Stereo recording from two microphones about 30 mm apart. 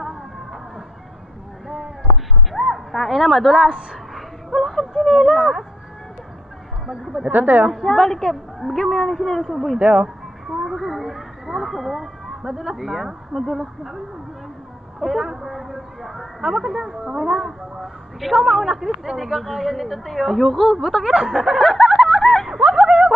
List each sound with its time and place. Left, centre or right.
0.0 s music: centre
1.6 s a sound: centre
2.5 s speech: centre
4.5 s speech: centre
7.3 s a woman's voice: right
7.7 s a woman's voice: centre
9.8 s speech: right
10.4 s a sound: centre
12.4 s a woman's voice: centre
15.0 s speech: centre
17.2 s a woman's voice: centre
20.8 s speech: centre
22.2 s a sound: centre
22.8 s a sound: right